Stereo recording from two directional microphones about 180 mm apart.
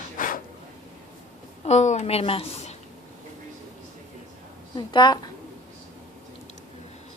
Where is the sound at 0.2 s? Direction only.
45° left (ahead or behind).